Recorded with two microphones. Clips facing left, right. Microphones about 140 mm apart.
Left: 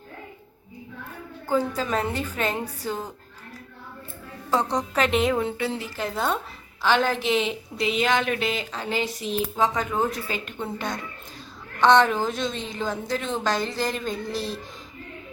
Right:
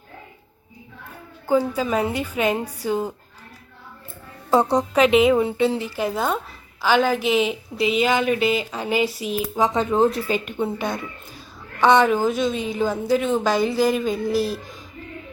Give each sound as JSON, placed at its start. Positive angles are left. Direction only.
{"t": 1.5, "sound": "a woman's voice", "side_deg": -10}
{"t": 4.5, "sound": "a woman's voice", "side_deg": -25}
{"t": 4.9, "sound": "a woman's voice", "side_deg": -5}
{"t": 5.5, "sound": "a woman's voice", "side_deg": -20}